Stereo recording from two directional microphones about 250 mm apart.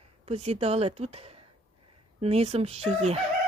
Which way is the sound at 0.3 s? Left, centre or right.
Right.